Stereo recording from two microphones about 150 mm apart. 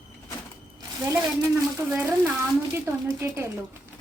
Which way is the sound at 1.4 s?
15° right (ahead or behind).